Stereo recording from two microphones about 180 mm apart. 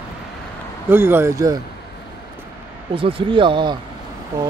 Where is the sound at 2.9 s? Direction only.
30° right (ahead or behind).